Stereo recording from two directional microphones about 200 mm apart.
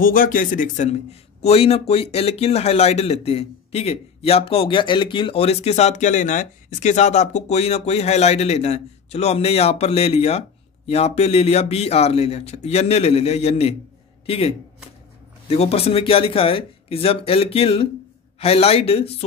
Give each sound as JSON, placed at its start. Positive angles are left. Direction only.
{"t": 0.0, "sound": "speech", "side_deg": 45}